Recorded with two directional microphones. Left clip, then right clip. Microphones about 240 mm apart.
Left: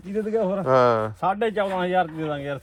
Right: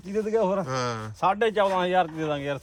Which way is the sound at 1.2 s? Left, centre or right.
Right.